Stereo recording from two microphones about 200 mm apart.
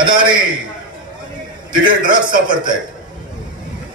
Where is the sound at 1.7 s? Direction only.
25° right (ahead or behind).